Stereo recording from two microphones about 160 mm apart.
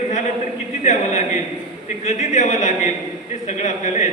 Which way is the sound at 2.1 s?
45° left (ahead or behind).